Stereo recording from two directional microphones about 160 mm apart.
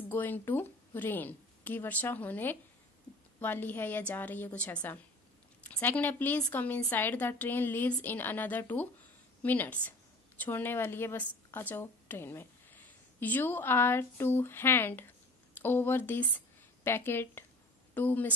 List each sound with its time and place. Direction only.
0.1 s a woman's voice: 10° left (ahead or behind)